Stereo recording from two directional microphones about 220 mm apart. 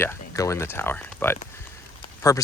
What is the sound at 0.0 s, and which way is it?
Speech, 15° left (ahead or behind).